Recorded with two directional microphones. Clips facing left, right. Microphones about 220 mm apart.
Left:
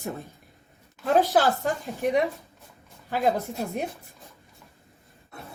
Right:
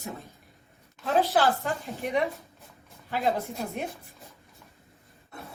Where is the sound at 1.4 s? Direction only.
45° left (ahead or behind).